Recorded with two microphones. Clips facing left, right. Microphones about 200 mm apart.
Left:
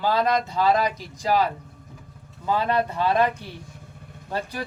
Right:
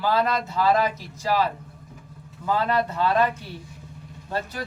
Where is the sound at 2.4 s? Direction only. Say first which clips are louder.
Even; 15° left (ahead or behind).